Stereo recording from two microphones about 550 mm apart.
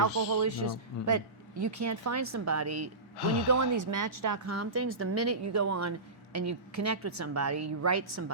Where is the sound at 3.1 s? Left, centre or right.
Left.